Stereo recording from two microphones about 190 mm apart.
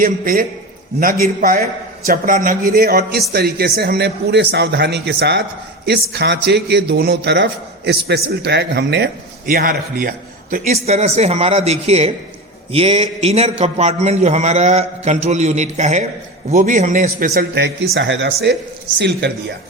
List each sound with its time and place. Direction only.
0.0 s a man's voice: 50° right (ahead or behind); by 9.0 s 65° right (ahead or behind)
9.5 s a man's voice: 50° right (ahead or behind)
10.7 s a man's voice: 35° right (ahead or behind); by 18.3 s 80° right
18.5 s a man's voice: 65° right (ahead or behind)